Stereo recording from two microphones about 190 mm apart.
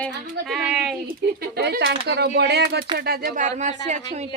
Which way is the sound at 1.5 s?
60° right (ahead or behind).